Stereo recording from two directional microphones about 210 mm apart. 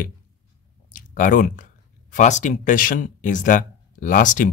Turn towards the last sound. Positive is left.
turn(degrees=40)  # may be behind; listen again after turning